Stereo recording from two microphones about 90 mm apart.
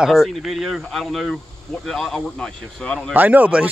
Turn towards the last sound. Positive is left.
turn(degrees=-15)  # may be behind; listen again after turning